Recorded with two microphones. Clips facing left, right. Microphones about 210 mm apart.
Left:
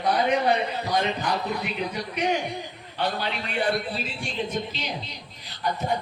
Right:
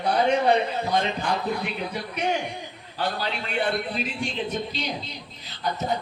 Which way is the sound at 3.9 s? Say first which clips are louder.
Right 4 dB; 15° right (ahead or behind).